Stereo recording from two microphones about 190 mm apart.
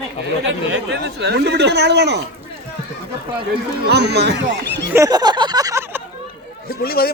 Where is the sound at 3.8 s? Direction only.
60° right (ahead or behind).